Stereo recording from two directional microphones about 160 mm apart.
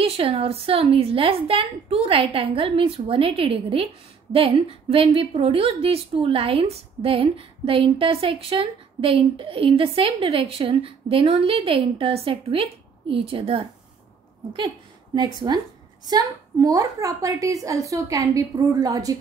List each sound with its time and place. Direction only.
0.0 s a woman's voice: 35° right (ahead or behind)
15.1 s a woman's voice: 25° right (ahead or behind)